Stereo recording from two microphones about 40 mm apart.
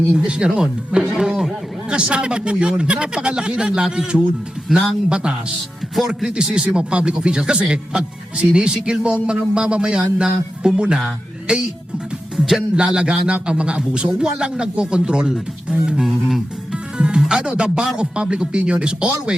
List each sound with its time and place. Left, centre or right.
0.3 s speech: right
1.9 s speech: right
6.0 s speech: centre
6.2 s speech: right
12.7 s speech: right
16.7 s music: right
17.5 s speech: right